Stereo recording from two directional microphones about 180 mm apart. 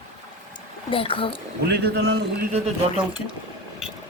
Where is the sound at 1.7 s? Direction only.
65° right (ahead or behind).